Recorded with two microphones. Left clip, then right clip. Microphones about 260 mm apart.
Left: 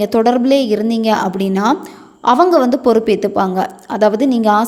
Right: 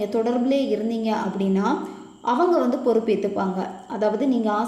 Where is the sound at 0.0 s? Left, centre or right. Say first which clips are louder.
Left 10 dB; left.